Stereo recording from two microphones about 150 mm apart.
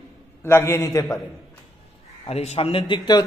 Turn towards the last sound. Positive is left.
turn(degrees=30)  # may be behind; listen again after turning